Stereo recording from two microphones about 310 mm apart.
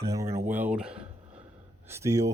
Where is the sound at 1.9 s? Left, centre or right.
Centre.